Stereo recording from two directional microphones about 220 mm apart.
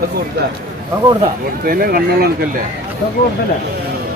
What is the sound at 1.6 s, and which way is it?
Speech, 40° right (ahead or behind).